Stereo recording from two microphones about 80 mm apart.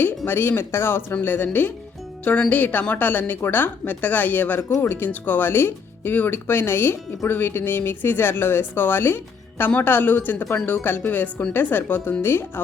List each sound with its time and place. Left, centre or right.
0.3 s speech: left